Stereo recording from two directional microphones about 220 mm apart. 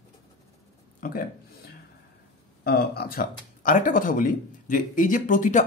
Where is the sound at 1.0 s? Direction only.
40° left (ahead or behind).